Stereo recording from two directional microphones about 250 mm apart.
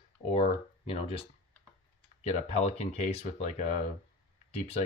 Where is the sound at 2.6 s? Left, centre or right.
Left.